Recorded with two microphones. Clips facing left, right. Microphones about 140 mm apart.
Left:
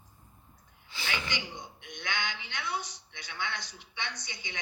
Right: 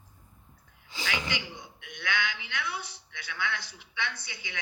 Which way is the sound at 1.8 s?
20° left (ahead or behind).